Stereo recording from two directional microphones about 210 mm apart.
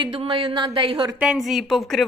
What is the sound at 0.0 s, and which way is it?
Speech, 25° right (ahead or behind).